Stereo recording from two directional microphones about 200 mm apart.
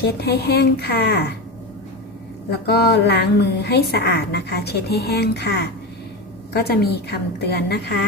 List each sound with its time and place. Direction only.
0.0 s a woman's voice: 55° left (ahead or behind)
2.6 s a woman's voice: 55° left (ahead or behind)